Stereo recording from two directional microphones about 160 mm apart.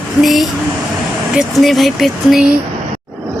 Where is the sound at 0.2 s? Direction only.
Centre (ahead or behind).